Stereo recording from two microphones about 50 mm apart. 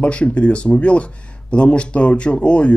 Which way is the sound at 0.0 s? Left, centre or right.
Left.